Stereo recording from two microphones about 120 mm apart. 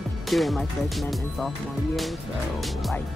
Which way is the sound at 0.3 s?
Centre (ahead or behind).